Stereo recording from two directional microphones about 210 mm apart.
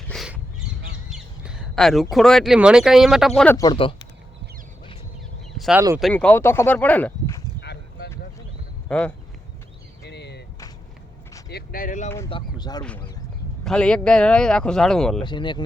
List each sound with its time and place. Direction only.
0.1 s crow: centre (ahead or behind)
1.1 s speech: centre (ahead or behind); by 3.9 s 20° left (ahead or behind)
5.5 s a sound: centre (ahead or behind)
6.0 s speech: 5° left (ahead or behind)
7.6 s a sound: 50° left (ahead or behind)
8.9 s speech: 5° left (ahead or behind)
10.0 s a sound: 55° left (ahead or behind)
11.4 s speech: 45° left (ahead or behind)
12.3 s speech: 20° left (ahead or behind)
13.7 s speech: 5° left (ahead or behind)
15.2 s speech: 20° left (ahead or behind)